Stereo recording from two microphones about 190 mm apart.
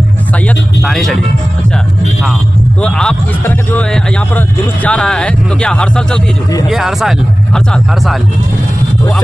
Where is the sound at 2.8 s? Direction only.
5° left (ahead or behind).